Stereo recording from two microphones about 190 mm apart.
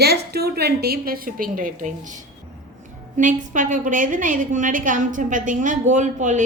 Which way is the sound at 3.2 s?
45° right (ahead or behind).